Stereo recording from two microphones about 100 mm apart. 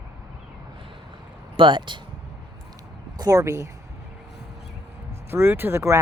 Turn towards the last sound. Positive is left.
turn(degrees=-25)  # may be behind; listen again after turning